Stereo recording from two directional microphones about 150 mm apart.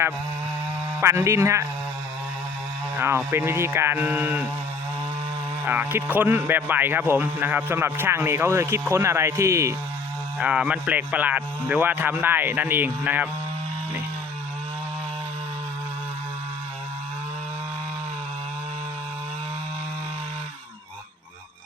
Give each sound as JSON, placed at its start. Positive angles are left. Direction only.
{"t": 1.0, "sound": "speech", "side_deg": -15}
{"t": 3.0, "sound": "a man's voice", "side_deg": -15}
{"t": 5.6, "sound": "a man's voice", "side_deg": -10}